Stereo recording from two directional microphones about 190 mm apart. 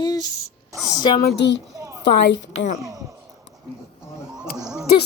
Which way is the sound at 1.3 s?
70° left (ahead or behind).